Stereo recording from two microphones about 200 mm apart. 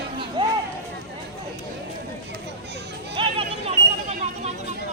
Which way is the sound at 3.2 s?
30° right (ahead or behind).